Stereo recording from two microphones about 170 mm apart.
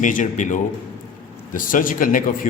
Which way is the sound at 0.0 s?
50° left (ahead or behind).